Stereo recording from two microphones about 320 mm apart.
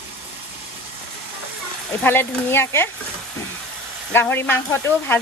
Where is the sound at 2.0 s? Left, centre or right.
Centre.